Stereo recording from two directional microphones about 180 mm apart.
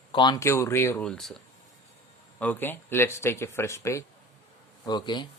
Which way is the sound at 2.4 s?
10° left (ahead or behind).